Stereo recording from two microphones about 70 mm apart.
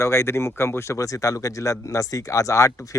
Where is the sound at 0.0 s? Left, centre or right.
Left.